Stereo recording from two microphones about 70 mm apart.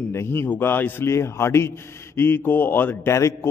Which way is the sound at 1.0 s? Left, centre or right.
Left.